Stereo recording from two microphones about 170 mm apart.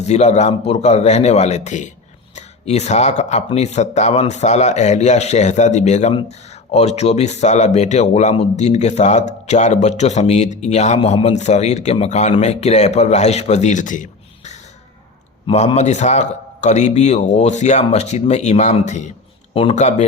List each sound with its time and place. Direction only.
0.0 s speech: 40° left (ahead or behind)